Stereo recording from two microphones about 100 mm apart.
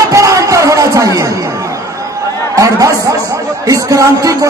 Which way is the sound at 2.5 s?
35° right (ahead or behind).